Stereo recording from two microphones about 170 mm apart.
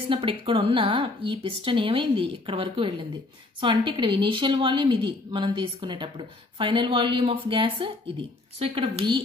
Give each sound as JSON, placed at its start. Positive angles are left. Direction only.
{"t": 0.1, "sound": "a woman's voice", "side_deg": -30}